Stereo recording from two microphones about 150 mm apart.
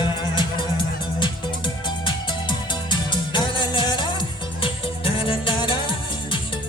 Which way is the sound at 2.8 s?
30° left (ahead or behind).